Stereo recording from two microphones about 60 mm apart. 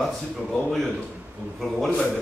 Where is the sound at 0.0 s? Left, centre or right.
Centre.